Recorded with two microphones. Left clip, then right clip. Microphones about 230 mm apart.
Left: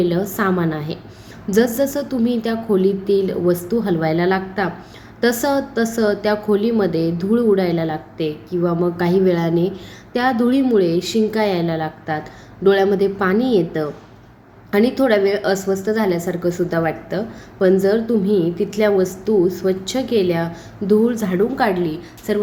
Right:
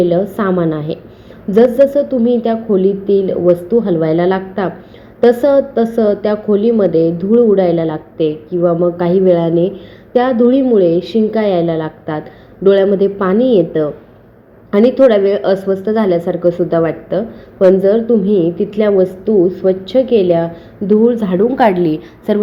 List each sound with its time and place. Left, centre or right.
0.0 s a woman's voice: centre
21.6 s a woman's voice: right